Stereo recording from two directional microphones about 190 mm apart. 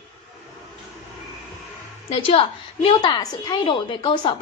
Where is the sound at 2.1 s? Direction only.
30° left (ahead or behind).